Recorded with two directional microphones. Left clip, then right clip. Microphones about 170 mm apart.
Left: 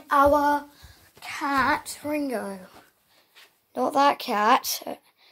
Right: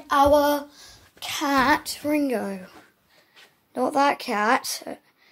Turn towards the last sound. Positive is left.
turn(degrees=10)  # may be behind; listen again after turning